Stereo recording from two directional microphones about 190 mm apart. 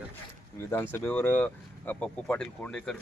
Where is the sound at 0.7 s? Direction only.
10° left (ahead or behind).